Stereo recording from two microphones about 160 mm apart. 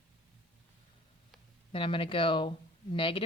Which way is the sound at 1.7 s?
35° left (ahead or behind).